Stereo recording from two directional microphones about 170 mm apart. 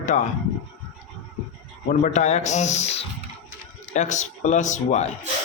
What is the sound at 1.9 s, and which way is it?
Speech, 45° left (ahead or behind).